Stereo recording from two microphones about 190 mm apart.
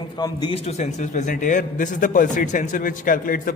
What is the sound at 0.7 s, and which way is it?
A man's voice, 40° left (ahead or behind).